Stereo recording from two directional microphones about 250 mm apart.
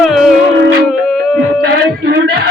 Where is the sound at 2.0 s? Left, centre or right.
Right.